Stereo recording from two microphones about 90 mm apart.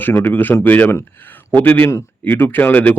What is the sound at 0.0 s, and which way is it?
A man's voice, 20° left (ahead or behind).